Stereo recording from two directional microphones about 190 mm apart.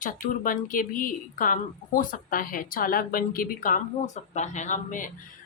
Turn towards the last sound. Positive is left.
turn(degrees=40)  # may be behind; listen again after turning